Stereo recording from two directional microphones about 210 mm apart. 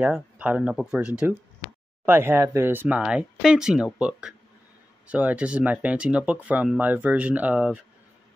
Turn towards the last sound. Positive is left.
turn(degrees=-5)  # may be behind; listen again after turning